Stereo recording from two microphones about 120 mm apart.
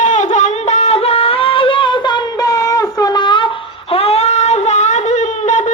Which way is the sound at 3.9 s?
55° left (ahead or behind).